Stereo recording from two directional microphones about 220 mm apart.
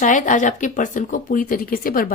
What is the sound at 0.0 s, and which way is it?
A woman's voice, 35° left (ahead or behind).